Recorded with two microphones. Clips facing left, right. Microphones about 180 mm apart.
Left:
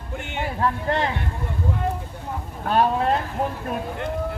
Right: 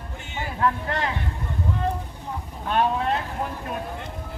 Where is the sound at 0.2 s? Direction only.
60° left (ahead or behind).